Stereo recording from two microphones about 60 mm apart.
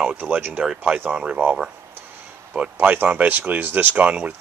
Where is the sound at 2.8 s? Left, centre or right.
Right.